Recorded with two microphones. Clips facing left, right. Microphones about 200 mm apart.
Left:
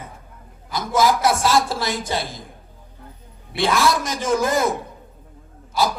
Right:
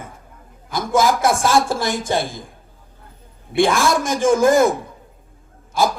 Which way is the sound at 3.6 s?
50° right (ahead or behind).